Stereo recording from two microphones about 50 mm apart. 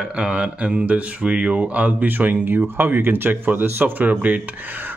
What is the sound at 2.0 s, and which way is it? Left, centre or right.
Speech, right.